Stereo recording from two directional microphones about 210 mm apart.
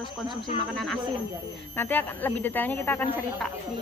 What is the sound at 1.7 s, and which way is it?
Speech, 10° left (ahead or behind).